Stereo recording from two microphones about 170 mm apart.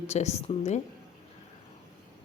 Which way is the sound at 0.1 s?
40° left (ahead or behind).